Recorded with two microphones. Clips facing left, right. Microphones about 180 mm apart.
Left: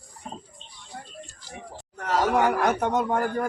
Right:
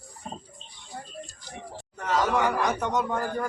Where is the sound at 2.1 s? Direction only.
50° left (ahead or behind).